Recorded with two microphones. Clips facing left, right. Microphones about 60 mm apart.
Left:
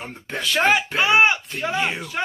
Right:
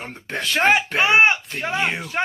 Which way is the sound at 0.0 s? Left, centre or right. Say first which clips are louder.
Right 1 dB; right.